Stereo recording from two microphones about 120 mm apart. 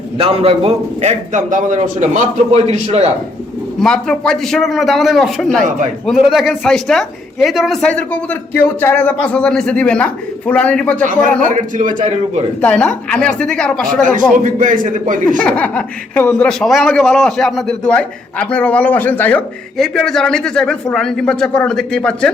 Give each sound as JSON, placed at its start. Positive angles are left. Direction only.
{"t": 0.2, "sound": "a man's voice", "side_deg": -55}
{"t": 3.8, "sound": "a man's voice", "side_deg": 5}
{"t": 11.4, "sound": "a man's voice", "side_deg": -90}
{"t": 12.6, "sound": "speech", "side_deg": 10}
{"t": 14.4, "sound": "a man's voice", "side_deg": -90}
{"t": 15.4, "sound": "speech", "side_deg": 10}
{"t": 19.7, "sound": "a man's voice", "side_deg": 5}